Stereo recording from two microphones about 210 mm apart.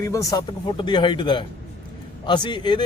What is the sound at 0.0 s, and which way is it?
Speech, 15° left (ahead or behind).